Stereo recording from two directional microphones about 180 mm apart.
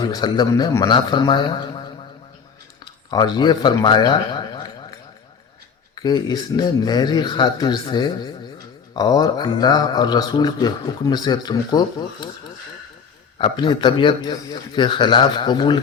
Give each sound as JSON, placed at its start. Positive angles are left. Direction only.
{"t": 0.0, "sound": "speech", "side_deg": 25}
{"t": 5.9, "sound": "speech", "side_deg": 25}
{"t": 13.4, "sound": "speech", "side_deg": 25}